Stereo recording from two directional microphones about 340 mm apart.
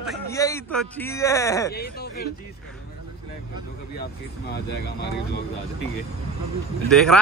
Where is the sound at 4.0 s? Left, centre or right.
Left.